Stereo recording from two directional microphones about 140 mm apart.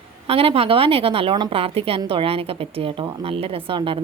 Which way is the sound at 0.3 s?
45° right (ahead or behind).